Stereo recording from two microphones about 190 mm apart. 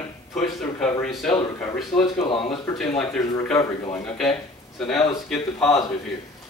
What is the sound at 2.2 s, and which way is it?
Speech, 30° left (ahead or behind).